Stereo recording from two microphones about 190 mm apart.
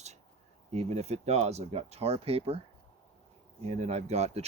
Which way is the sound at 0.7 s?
35° right (ahead or behind).